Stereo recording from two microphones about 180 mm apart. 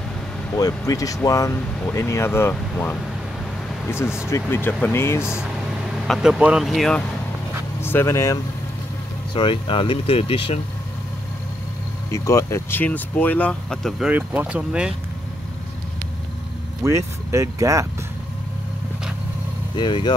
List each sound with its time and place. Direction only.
0.6 s speech: 20° left (ahead or behind)
4.3 s speech: 10° left (ahead or behind)
5.2 s speech: 5° right (ahead or behind)
7.8 s speech: 15° left (ahead or behind)
9.3 s speech: 30° left (ahead or behind)
12.1 s speech: 15° left (ahead or behind); by 15.0 s 5° right (ahead or behind)
16.8 s speech: 15° right (ahead or behind)
19.8 s speech: 25° left (ahead or behind)